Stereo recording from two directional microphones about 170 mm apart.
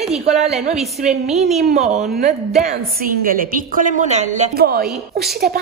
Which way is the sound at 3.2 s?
55° right (ahead or behind).